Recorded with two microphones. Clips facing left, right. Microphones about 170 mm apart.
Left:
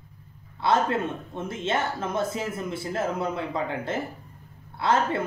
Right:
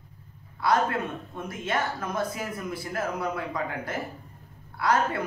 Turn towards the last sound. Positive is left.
turn(degrees=25)  # may be behind; listen again after turning